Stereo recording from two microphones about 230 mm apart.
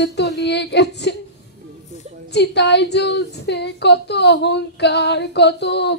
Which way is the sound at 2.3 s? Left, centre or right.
Left.